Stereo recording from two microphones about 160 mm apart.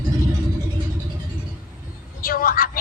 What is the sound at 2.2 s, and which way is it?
Speech, 60° left (ahead or behind).